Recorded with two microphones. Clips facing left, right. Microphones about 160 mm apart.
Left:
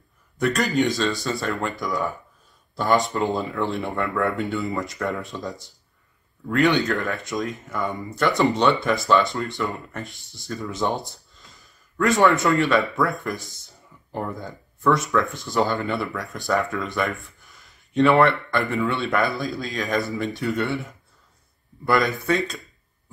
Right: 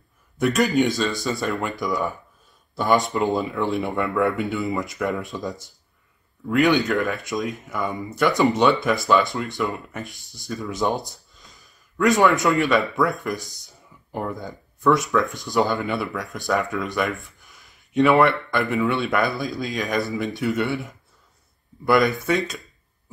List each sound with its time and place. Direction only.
0.4 s speech: centre (ahead or behind)